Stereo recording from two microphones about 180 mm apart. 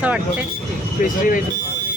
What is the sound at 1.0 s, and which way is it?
Speech, 50° left (ahead or behind).